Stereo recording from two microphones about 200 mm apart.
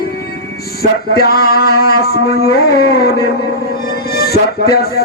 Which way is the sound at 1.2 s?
50° left (ahead or behind).